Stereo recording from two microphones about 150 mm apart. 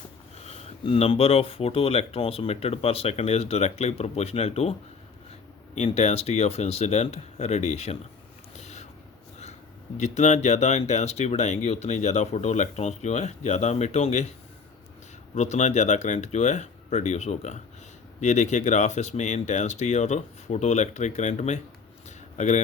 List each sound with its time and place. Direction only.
0.3 s speech: 45° left (ahead or behind)
5.7 s speech: 45° left (ahead or behind)
8.5 s a sound: 45° left (ahead or behind)
10.0 s speech: 50° left (ahead or behind)
15.4 s speech: 50° left (ahead or behind)